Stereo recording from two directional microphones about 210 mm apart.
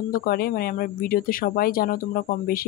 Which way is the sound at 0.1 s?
45° left (ahead or behind).